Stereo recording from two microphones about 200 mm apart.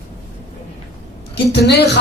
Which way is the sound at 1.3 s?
55° left (ahead or behind).